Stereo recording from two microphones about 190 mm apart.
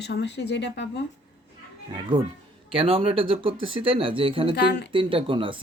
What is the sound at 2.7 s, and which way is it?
Speech, 30° right (ahead or behind).